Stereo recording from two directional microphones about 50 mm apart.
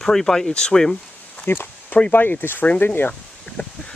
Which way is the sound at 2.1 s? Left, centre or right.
Left.